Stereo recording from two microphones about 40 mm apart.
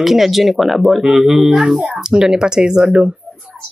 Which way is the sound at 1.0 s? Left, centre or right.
Centre.